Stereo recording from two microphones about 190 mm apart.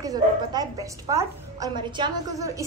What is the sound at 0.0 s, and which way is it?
A woman's voice, 20° right (ahead or behind).